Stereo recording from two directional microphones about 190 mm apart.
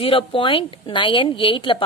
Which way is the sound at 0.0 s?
30° left (ahead or behind).